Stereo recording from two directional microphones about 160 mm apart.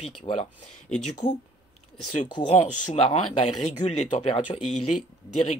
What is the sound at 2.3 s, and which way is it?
Speech, 30° left (ahead or behind).